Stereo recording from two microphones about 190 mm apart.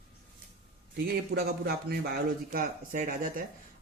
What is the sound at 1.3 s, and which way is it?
Speech, 75° right (ahead or behind).